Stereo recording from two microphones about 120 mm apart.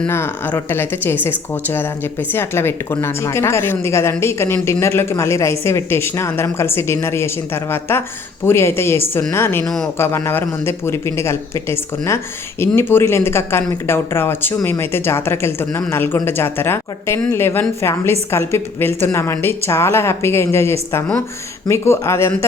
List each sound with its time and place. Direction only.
0.1 s speech: 20° left (ahead or behind)